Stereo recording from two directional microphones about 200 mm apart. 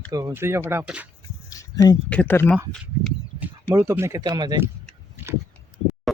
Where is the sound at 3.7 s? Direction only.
15° right (ahead or behind).